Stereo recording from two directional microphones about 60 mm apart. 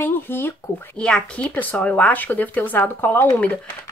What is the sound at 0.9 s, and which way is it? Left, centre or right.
Speech, centre.